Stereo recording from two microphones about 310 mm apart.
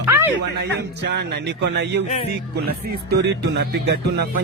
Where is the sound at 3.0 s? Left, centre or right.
Right.